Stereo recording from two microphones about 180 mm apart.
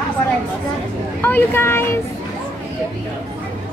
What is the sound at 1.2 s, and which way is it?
Speech, 10° left (ahead or behind).